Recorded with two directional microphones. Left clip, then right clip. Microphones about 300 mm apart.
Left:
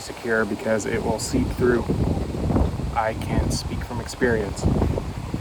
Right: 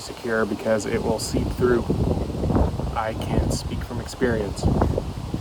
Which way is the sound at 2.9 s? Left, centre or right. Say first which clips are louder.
Left 5 dB; centre.